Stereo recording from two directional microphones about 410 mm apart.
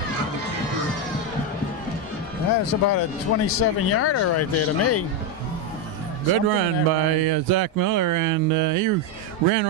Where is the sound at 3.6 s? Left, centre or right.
Left.